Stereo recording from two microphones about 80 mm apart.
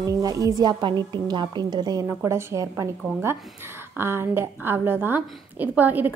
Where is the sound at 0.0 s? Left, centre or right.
Right.